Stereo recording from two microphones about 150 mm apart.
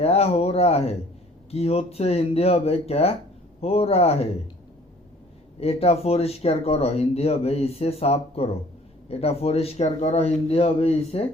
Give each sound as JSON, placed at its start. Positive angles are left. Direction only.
{"t": 0.0, "sound": "speech", "side_deg": 45}
{"t": 5.5, "sound": "speech", "side_deg": 40}